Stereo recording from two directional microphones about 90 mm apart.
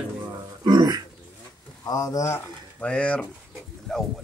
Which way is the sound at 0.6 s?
50° right (ahead or behind).